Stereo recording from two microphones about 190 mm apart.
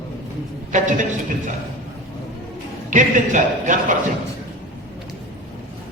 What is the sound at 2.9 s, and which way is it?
Speech, 40° right (ahead or behind).